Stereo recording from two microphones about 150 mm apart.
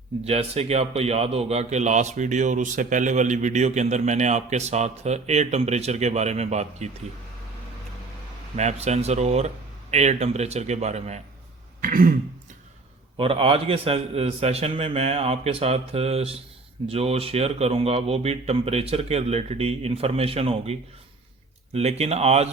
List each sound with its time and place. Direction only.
0.3 s a man's voice: 45° right (ahead or behind)
8.5 s a man's voice: 50° right (ahead or behind)
11.8 s throat clearing: 65° right (ahead or behind)
13.1 s a man's voice: 35° right (ahead or behind)